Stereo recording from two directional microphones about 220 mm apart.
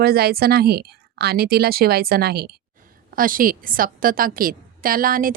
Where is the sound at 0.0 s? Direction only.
45° right (ahead or behind).